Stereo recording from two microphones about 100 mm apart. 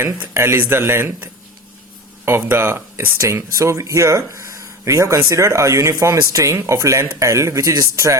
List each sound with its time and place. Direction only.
0.0 s speech: 25° right (ahead or behind)